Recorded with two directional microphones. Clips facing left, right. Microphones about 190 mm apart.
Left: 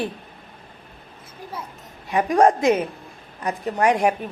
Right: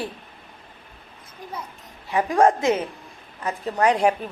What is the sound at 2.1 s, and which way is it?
Speech, 20° left (ahead or behind).